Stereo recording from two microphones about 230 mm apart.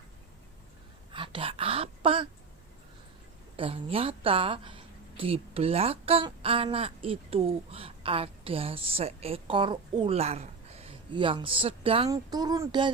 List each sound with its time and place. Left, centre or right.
1.1 s speech: right
3.6 s speech: right